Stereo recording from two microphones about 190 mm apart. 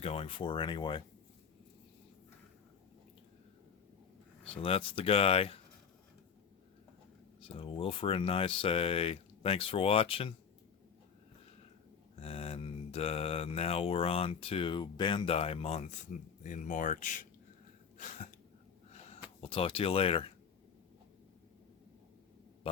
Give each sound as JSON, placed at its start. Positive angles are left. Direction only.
{"t": 0.0, "sound": "speech", "side_deg": 30}
{"t": 4.6, "sound": "speech", "side_deg": 30}
{"t": 7.4, "sound": "speech", "side_deg": 30}
{"t": 12.2, "sound": "speech", "side_deg": 30}
{"t": 17.9, "sound": "throat clearing", "side_deg": 40}
{"t": 19.4, "sound": "speech", "side_deg": 30}